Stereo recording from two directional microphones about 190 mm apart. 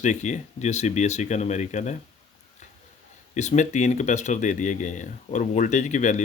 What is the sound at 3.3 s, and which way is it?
Speech, 35° left (ahead or behind).